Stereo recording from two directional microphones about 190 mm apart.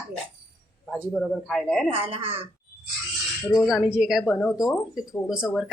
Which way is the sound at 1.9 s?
30° right (ahead or behind).